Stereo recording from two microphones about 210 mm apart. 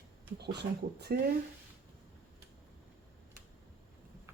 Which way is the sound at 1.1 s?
45° right (ahead or behind).